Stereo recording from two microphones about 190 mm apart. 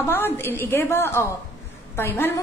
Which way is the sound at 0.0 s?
10° left (ahead or behind).